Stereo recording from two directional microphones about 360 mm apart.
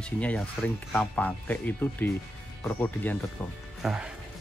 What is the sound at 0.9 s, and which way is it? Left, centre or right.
Speech, centre.